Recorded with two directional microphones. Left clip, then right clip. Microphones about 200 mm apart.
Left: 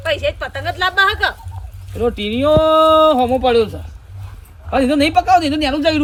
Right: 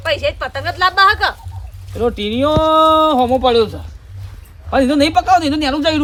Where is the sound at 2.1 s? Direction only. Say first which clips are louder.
Right 1 dB; 50° right (ahead or behind).